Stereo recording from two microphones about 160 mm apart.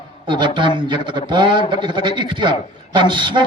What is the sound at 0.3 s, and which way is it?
A man's voice, 30° right (ahead or behind).